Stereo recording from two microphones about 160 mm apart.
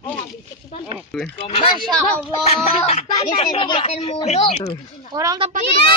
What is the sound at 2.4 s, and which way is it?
Speech, 40° left (ahead or behind).